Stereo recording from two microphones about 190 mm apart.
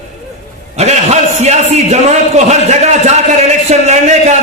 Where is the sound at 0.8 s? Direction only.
35° right (ahead or behind).